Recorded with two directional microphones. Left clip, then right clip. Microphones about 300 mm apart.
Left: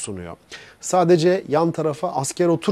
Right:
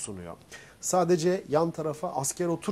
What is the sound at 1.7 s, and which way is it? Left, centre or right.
Speech, left.